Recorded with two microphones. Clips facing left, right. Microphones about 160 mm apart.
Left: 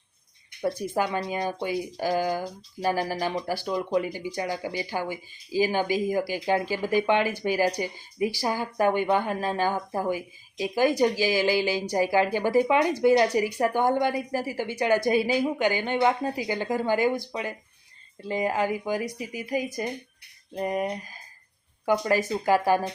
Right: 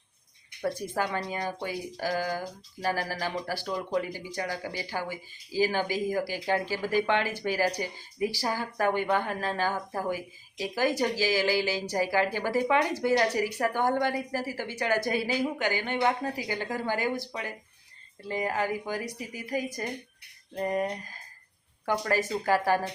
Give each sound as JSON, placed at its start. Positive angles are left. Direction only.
{"t": 0.8, "sound": "speech", "side_deg": 15}